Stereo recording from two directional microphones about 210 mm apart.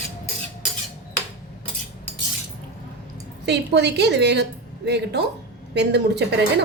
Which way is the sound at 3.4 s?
55° right (ahead or behind).